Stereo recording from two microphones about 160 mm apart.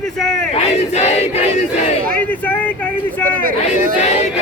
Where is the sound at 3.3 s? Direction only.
60° right (ahead or behind).